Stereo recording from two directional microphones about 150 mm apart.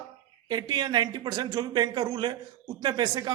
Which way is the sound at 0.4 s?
25° right (ahead or behind).